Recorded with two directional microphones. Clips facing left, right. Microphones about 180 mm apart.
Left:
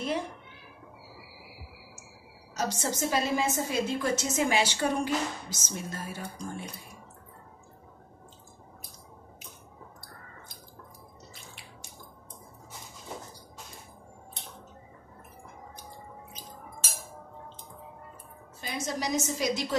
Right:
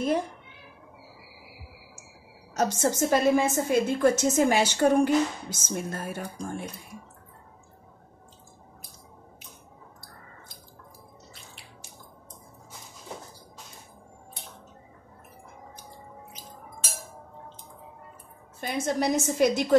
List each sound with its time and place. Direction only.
2.5 s a woman's voice: 50° right (ahead or behind)
18.6 s a woman's voice: 55° right (ahead or behind)